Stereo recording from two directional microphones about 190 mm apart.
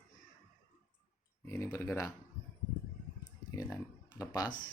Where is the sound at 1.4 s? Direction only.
15° left (ahead or behind).